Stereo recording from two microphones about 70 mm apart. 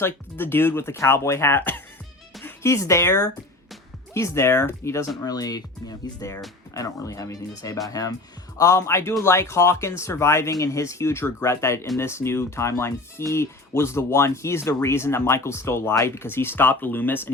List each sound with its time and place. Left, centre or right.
0.0 s speech: left
2.6 s speech: left
5.2 s speech: left
6.2 s speech: left